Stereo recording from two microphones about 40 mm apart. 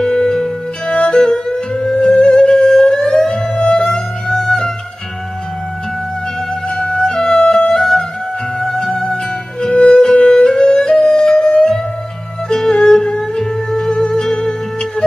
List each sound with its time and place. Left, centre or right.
0.1 s music: centre
6.8 s music: centre